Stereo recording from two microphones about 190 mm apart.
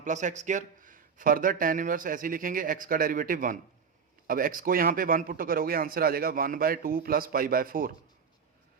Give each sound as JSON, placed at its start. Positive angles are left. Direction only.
{"t": 0.0, "sound": "a man's voice", "side_deg": -40}